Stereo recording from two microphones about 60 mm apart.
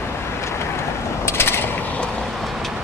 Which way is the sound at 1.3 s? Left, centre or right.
Left.